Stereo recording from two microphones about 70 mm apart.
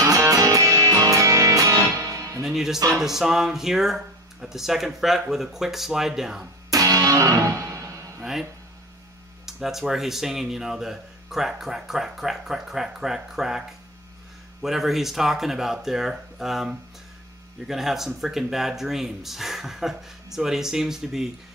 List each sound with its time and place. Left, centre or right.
0.0 s music: right
2.4 s music: centre
3.0 s speech: centre
6.7 s music: right
8.2 s a sound: centre
9.5 s speech: centre